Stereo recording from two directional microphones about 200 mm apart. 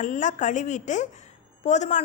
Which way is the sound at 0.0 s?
40° left (ahead or behind).